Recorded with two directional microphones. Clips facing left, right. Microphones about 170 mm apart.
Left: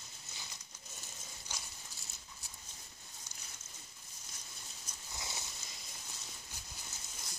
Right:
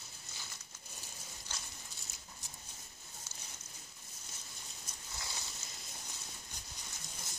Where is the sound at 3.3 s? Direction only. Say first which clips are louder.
Right 2 dB; 15° left (ahead or behind).